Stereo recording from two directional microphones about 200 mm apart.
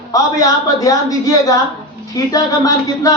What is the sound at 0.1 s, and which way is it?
A woman's voice, 15° left (ahead or behind).